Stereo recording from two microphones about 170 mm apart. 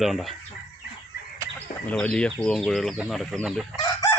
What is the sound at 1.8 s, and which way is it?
Speech, 10° left (ahead or behind).